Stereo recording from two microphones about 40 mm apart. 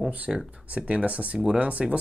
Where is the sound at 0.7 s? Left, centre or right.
Right.